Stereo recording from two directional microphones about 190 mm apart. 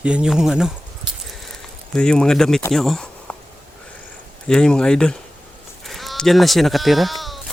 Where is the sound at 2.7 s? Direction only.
Centre (ahead or behind).